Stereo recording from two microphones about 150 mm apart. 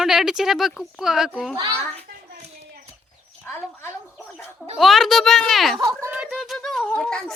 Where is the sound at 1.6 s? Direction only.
35° right (ahead or behind).